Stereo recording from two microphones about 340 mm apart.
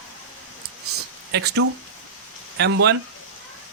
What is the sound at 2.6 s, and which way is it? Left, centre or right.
Speech, right.